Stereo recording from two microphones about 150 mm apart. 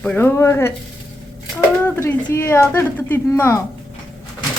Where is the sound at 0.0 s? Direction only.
10° left (ahead or behind).